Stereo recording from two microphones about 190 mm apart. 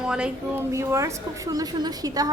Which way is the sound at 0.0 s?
5° right (ahead or behind).